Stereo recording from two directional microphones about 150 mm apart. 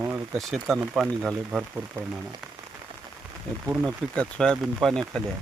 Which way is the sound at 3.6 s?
10° right (ahead or behind).